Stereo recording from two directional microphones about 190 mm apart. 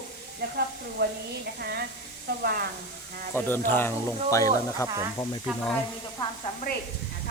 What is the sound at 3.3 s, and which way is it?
Speech, 10° left (ahead or behind).